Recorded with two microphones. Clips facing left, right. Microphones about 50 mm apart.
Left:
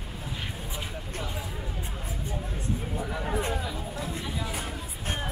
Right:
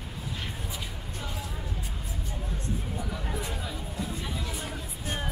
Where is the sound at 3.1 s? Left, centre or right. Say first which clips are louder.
Left 5 dB; left.